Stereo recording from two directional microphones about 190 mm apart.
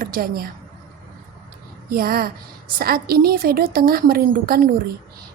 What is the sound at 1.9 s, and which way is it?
A woman's voice, 50° right (ahead or behind).